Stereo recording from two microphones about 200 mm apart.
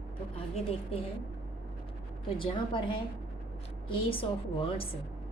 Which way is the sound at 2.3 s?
25° left (ahead or behind).